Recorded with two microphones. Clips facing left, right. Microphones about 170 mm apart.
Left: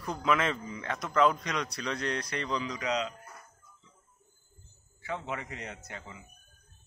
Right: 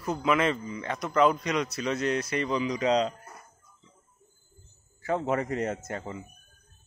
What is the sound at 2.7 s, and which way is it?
Speech, 30° right (ahead or behind).